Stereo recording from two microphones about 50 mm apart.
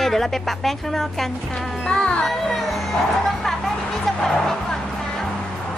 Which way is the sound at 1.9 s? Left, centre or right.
Centre.